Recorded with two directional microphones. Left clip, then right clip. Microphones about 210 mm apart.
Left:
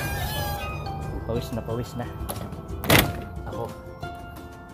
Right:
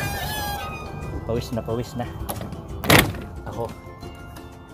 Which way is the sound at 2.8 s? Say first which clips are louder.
Right 3 dB; 30° right (ahead or behind).